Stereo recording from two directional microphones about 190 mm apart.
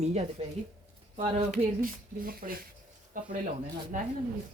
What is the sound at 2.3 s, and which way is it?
Speech, 50° right (ahead or behind).